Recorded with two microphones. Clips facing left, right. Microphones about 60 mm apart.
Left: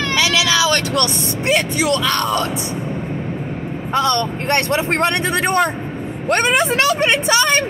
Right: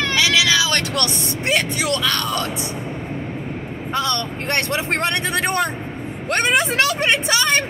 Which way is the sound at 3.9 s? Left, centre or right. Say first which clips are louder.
Left 5 dB; left.